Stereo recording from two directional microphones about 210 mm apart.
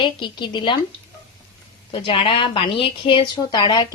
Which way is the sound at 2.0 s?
25° left (ahead or behind).